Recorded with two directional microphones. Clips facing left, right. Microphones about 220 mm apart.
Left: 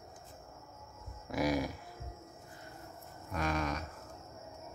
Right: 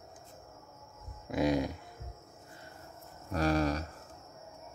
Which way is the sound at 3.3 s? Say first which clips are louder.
Right 6 dB; 35° right (ahead or behind).